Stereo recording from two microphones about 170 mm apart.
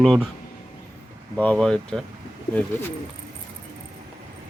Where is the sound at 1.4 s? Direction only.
5° left (ahead or behind).